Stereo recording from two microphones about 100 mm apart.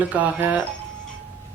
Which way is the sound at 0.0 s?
15° right (ahead or behind).